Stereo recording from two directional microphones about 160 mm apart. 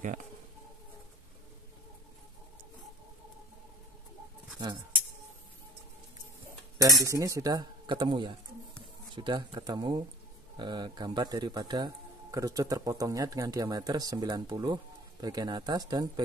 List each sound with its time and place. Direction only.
6.8 s speech: 20° right (ahead or behind)